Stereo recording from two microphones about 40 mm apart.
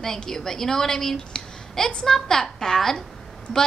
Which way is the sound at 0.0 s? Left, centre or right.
Centre.